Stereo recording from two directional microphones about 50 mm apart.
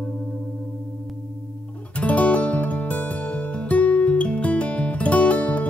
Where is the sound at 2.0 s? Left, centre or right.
Left.